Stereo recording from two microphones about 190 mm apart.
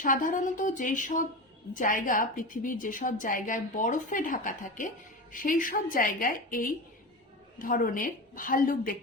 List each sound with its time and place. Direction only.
0.0 s a woman's voice: 45° left (ahead or behind)